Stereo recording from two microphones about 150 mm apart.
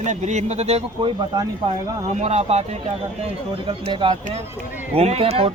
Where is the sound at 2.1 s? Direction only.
45° right (ahead or behind).